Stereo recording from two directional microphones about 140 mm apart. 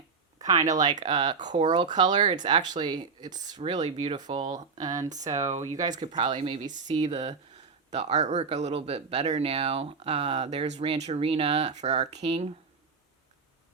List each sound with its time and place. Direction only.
0.3 s a sound: 25° right (ahead or behind)
0.8 s speech: 30° right (ahead or behind)
6.9 s speech: 50° right (ahead or behind)